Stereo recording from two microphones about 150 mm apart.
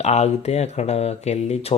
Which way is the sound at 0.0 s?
45° left (ahead or behind).